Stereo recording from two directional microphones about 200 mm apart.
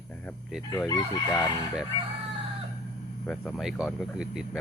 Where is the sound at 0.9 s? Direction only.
20° left (ahead or behind).